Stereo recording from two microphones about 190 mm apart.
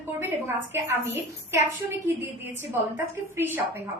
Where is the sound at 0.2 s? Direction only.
10° right (ahead or behind).